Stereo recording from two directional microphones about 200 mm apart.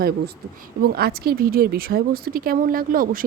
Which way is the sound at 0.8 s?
50° right (ahead or behind).